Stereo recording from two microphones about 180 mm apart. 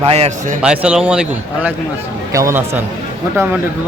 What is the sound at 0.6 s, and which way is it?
A man's voice, 5° right (ahead or behind).